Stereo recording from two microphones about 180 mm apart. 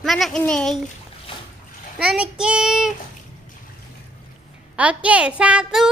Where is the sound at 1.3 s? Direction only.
30° left (ahead or behind).